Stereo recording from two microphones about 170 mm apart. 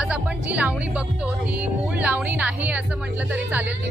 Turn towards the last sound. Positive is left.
turn(degrees=-10)  # may be behind; listen again after turning